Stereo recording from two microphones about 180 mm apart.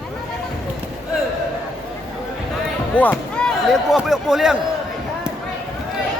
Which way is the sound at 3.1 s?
5° left (ahead or behind).